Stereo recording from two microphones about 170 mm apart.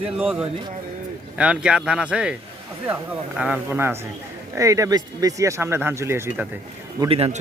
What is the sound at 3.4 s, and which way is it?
Speech, 5° right (ahead or behind).